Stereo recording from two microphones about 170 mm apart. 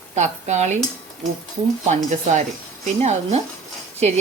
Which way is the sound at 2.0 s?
45° right (ahead or behind).